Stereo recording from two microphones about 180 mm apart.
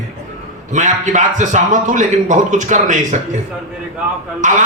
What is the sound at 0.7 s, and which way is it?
A man's voice, 40° right (ahead or behind).